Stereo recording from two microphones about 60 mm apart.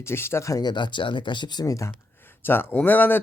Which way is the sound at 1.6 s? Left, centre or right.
Left.